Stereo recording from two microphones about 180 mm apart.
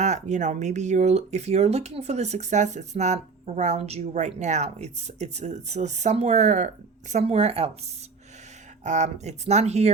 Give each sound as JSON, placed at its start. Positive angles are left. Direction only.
{"t": 0.0, "sound": "speech", "side_deg": -40}
{"t": 8.8, "sound": "speech", "side_deg": -40}